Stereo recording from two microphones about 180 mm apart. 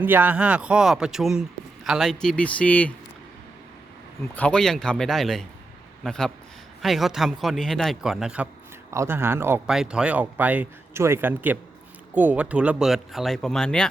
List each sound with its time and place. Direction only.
0.0 s speech: 10° right (ahead or behind); by 2.9 s 10° left (ahead or behind)
4.4 s speech: 5° left (ahead or behind)